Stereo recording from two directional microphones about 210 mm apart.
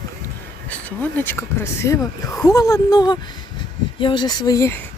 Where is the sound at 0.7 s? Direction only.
10° left (ahead or behind).